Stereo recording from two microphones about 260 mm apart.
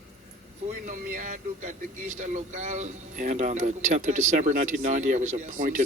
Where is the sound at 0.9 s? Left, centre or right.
Right.